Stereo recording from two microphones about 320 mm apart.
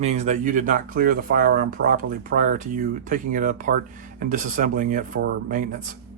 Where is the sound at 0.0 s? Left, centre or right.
Right.